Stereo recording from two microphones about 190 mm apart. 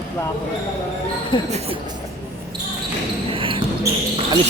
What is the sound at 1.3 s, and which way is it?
Speech, 25° left (ahead or behind).